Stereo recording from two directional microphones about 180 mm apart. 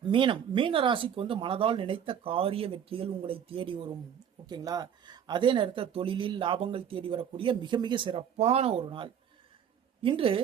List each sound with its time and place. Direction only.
0.0 s a woman's voice: 30° right (ahead or behind)